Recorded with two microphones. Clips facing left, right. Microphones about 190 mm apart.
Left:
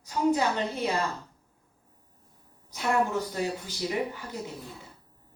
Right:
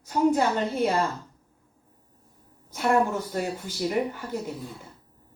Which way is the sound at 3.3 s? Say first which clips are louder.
Right 2 dB; 50° right (ahead or behind).